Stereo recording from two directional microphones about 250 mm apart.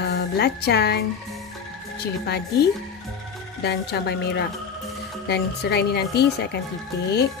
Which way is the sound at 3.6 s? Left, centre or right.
Left.